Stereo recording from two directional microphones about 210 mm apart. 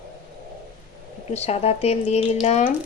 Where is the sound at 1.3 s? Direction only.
30° left (ahead or behind).